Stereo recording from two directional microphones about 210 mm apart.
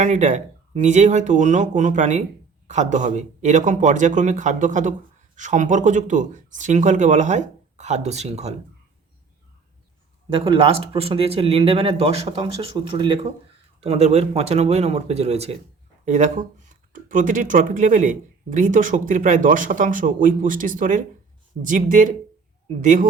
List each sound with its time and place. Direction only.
0.0 s speech: 35° right (ahead or behind)
10.3 s speech: 25° right (ahead or behind)